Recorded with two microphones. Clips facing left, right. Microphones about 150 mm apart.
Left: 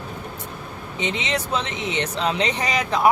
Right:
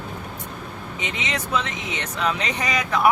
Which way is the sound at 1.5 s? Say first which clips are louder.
Left 1 dB; 25° left (ahead or behind).